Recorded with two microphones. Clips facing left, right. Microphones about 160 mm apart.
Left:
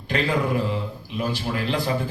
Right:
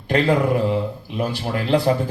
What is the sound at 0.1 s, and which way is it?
Speech, 55° right (ahead or behind).